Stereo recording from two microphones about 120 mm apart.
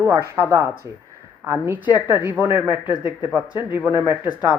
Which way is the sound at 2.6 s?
40° left (ahead or behind).